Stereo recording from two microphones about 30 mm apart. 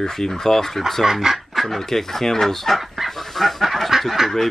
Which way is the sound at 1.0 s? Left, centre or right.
Centre.